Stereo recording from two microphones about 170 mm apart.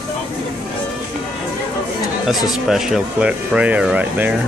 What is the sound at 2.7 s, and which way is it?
Speech, 5° right (ahead or behind).